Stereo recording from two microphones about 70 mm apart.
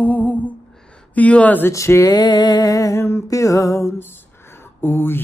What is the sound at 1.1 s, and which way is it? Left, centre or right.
Speech, centre.